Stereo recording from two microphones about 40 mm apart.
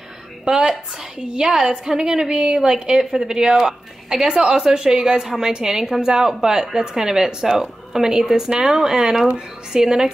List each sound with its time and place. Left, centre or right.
0.5 s a woman's voice: right